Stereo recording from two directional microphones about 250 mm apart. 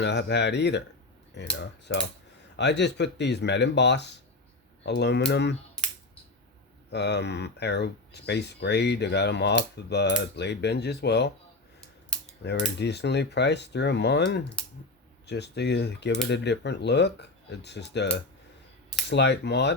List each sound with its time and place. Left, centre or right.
0.0 s speech: left
5.8 s computer keyboard: centre
6.9 s speech: left
12.4 s speech: left